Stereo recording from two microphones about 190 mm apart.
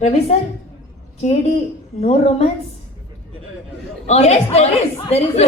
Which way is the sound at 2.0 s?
35° left (ahead or behind).